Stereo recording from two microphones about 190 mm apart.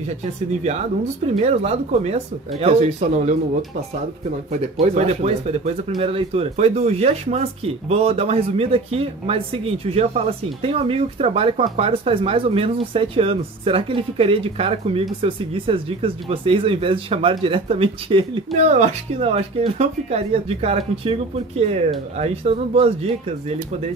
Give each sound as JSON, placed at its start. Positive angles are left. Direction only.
{"t": 1.2, "sound": "speech", "side_deg": -35}
{"t": 4.5, "sound": "speech", "side_deg": -35}